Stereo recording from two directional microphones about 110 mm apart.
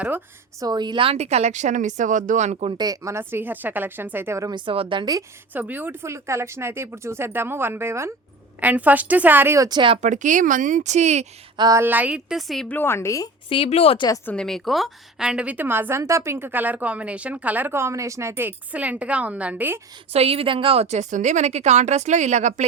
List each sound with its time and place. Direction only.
0.6 s speech: 40° right (ahead or behind)
1.1 s a woman's voice: 80° right
2.7 s speech: 35° right (ahead or behind)
4.5 s a woman's voice: 55° right (ahead or behind)
5.5 s a woman's voice: 15° right (ahead or behind)
9.6 s speech: 40° right (ahead or behind)
10.8 s speech: 90° right
11.5 s speech: 40° right (ahead or behind)
11.8 s a woman's voice: 15° right (ahead or behind); by 12.6 s centre (ahead or behind)
12.6 s a woman's voice: 20° left (ahead or behind)
13.5 s speech: 60° left (ahead or behind)
14.3 s a woman's voice: 5° left (ahead or behind); by 19.8 s 15° right (ahead or behind)
20.1 s a woman's voice: 60° right (ahead or behind)
20.8 s speech: 90° right